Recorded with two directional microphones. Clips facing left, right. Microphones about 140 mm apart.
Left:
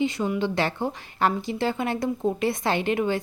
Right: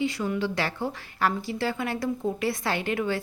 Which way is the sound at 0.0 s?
20° left (ahead or behind).